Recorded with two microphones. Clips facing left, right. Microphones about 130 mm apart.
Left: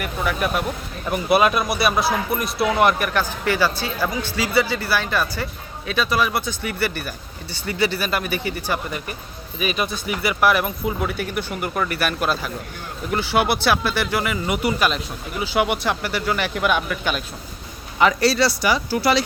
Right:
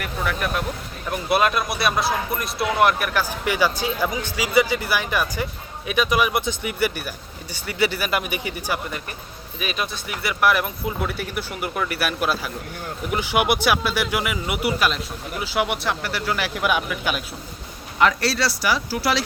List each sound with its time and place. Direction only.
0.0 s speech: 5° left (ahead or behind); by 8.8 s 10° right (ahead or behind)
9.6 s speech: centre (ahead or behind)